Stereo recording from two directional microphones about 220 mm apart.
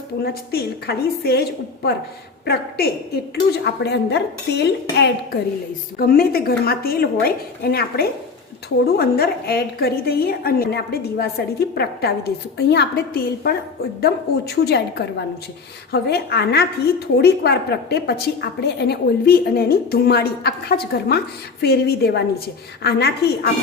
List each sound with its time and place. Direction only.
0.5 s a woman's voice: 45° left (ahead or behind)